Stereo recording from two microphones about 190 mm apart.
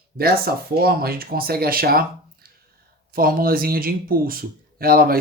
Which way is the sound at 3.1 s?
50° right (ahead or behind).